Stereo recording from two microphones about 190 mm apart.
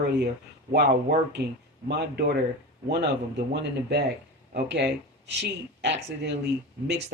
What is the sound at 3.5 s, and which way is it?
Speech, 60° right (ahead or behind).